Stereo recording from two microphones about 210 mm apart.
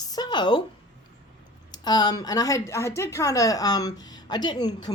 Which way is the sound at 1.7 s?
20° left (ahead or behind).